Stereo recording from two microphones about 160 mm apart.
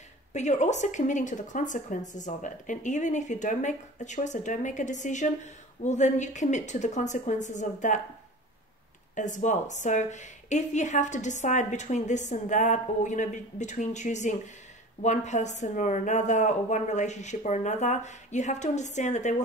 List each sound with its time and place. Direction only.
0.3 s a woman's voice: 45° left (ahead or behind)
9.1 s a woman's voice: 50° left (ahead or behind)